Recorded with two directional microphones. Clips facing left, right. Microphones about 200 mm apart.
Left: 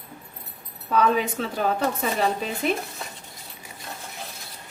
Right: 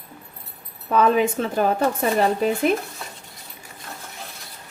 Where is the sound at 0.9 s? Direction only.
50° right (ahead or behind).